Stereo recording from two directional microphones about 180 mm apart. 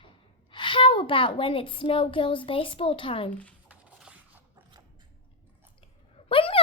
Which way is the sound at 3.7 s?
5° right (ahead or behind).